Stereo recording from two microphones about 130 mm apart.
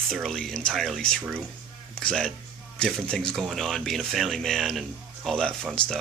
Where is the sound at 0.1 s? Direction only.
5° left (ahead or behind).